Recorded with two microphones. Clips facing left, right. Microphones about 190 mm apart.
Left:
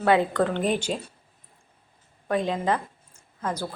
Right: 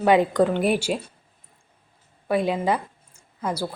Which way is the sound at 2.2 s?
10° right (ahead or behind).